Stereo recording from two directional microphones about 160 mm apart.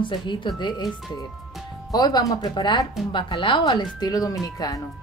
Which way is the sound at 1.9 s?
25° left (ahead or behind).